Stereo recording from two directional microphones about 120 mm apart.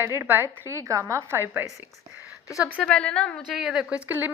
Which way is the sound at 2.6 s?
10° left (ahead or behind).